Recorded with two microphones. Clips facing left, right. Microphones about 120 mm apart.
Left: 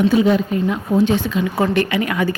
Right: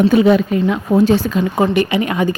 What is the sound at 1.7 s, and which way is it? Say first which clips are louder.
Speech: right 2 dB; 20° right (ahead or behind).